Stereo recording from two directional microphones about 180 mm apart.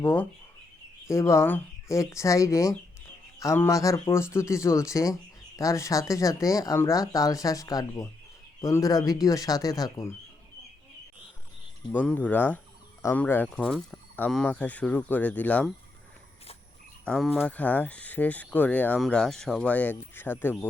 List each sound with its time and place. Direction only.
0.0 s speech: 10° left (ahead or behind)
11.9 s speech: 10° left (ahead or behind)
17.1 s speech: centre (ahead or behind)